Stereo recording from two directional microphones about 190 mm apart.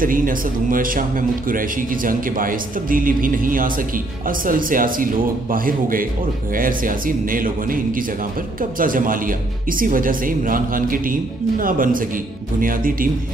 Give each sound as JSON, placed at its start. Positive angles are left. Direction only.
{"t": 0.0, "sound": "speech", "side_deg": -45}